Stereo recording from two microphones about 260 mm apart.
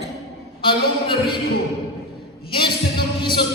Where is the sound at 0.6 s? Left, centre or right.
Centre.